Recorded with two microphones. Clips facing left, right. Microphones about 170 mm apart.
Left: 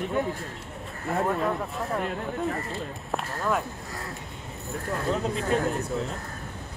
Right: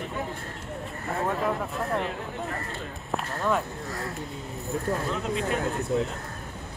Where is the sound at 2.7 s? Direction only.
Centre (ahead or behind).